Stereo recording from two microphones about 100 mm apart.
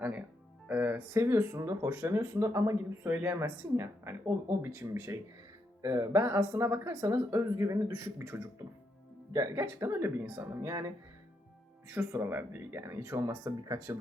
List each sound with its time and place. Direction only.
0.7 s music: 15° right (ahead or behind)
1.2 s speech: 30° right (ahead or behind)
9.6 s speech: 25° right (ahead or behind)
10.6 s speech: 35° right (ahead or behind)
11.9 s speech: 20° right (ahead or behind)